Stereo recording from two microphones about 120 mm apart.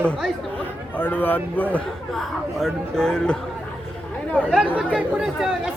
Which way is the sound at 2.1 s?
Centre (ahead or behind).